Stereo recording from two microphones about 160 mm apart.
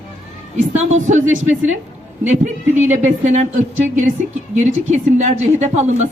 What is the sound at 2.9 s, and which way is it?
Speech, 50° right (ahead or behind).